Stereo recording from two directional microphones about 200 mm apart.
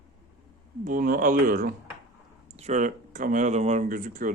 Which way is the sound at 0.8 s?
45° right (ahead or behind).